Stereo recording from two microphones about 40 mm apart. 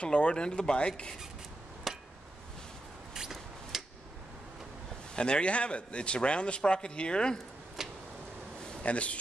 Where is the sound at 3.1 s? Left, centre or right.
Centre.